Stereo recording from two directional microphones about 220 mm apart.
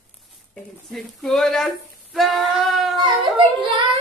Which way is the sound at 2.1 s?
Centre (ahead or behind).